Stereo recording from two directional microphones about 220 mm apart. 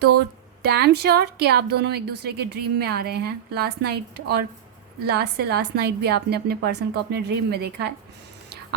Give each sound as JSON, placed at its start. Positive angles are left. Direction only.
{"t": 0.6, "sound": "a woman's voice", "side_deg": -50}